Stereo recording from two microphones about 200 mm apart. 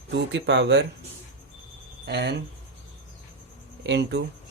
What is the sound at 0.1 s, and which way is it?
Speech, 60° right (ahead or behind).